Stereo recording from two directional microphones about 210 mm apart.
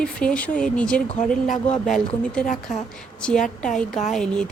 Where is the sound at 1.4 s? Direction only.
35° left (ahead or behind).